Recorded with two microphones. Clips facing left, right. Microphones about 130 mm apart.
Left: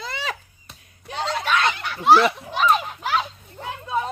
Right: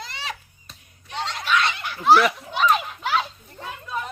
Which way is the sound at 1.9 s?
25° left (ahead or behind).